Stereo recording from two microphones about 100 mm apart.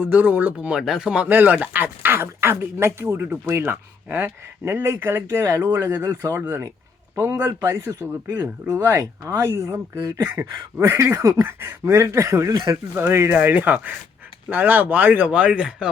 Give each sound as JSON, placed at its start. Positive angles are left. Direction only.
{"t": 0.1, "sound": "speech", "side_deg": -15}
{"t": 8.4, "sound": "speech", "side_deg": -40}
{"t": 8.8, "sound": "speech", "side_deg": -25}